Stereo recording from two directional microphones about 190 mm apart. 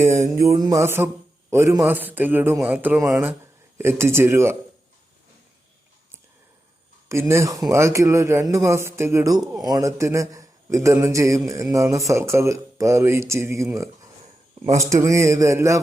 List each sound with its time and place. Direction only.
0.0 s mantra: 40° right (ahead or behind)
0.4 s a man's voice: 20° right (ahead or behind)
7.1 s a man's voice: 15° right (ahead or behind)